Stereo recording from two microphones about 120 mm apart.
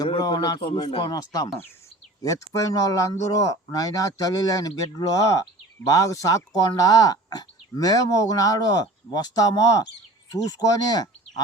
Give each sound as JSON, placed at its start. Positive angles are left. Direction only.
{"t": 0.2, "sound": "a man's voice", "side_deg": 35}